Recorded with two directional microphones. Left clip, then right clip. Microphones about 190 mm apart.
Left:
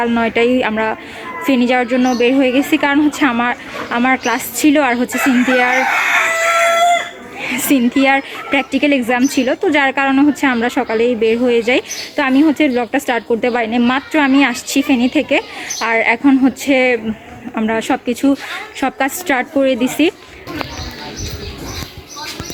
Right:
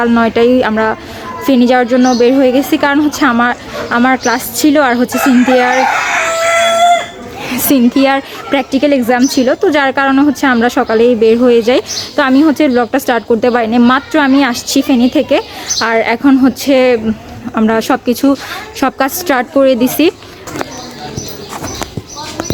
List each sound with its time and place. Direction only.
0.0 s a woman's voice: 15° right (ahead or behind)
7.4 s a woman's voice: 15° right (ahead or behind)